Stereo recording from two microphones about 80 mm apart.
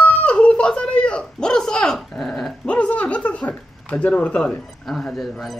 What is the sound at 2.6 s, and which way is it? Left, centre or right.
Speech, centre.